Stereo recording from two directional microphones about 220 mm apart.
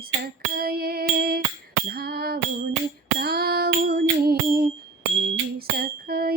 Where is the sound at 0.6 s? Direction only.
45° right (ahead or behind).